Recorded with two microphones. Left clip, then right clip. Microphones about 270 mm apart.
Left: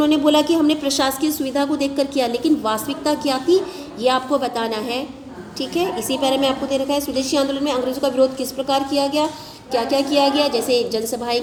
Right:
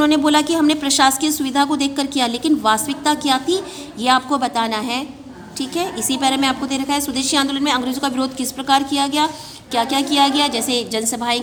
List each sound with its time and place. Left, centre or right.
0.1 s a woman's voice: right